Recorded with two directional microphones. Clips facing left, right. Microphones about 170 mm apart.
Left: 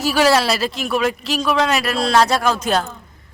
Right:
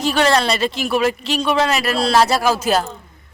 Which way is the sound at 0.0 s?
5° left (ahead or behind).